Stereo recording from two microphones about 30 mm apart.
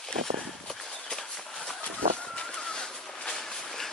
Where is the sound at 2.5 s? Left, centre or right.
Left.